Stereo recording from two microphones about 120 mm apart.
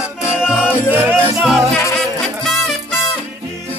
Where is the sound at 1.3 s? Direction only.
Centre (ahead or behind).